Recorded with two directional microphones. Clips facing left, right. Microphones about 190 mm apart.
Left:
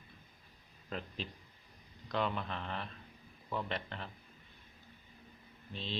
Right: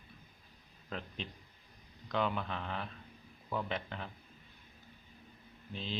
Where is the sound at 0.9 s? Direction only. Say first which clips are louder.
Left 1 dB; centre (ahead or behind).